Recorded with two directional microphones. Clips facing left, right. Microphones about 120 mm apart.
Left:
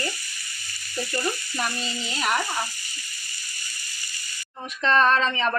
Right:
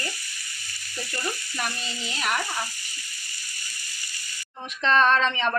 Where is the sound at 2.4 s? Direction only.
15° left (ahead or behind).